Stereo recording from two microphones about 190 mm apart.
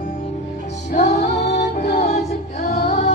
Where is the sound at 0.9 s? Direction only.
40° left (ahead or behind).